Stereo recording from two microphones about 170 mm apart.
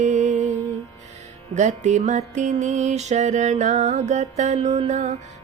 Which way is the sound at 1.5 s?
45° right (ahead or behind).